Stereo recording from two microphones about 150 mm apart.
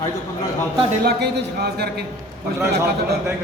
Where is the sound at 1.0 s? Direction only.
90° right.